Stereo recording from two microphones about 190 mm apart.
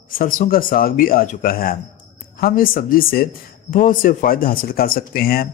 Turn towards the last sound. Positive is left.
turn(degrees=50)  # may be behind; listen again after turning